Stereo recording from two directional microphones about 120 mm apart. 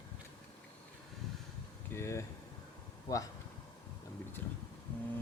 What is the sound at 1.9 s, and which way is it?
Speech, 20° left (ahead or behind).